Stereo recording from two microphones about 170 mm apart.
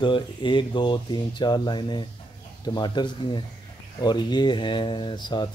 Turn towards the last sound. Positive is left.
turn(degrees=25)  # may be behind; listen again after turning